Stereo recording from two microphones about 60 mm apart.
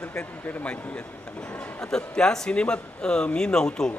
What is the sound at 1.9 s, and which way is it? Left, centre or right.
A man's voice, centre.